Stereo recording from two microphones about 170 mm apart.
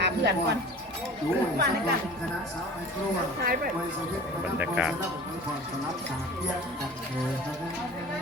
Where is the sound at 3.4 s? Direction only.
65° right (ahead or behind).